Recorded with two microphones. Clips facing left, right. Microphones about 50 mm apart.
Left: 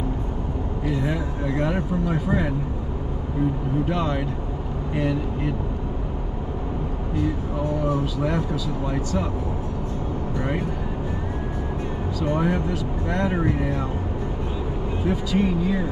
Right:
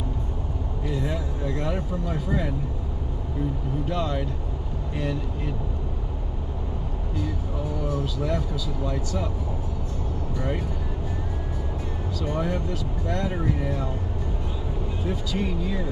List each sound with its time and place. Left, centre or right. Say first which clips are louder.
0.8 s speech: left 3 dB; left
3.9 s speech: left 3 dB; left
7.8 s speech: left 2 dB; centre
12.2 s speech: left 5 dB; left
15.0 s speech: left 6 dB; left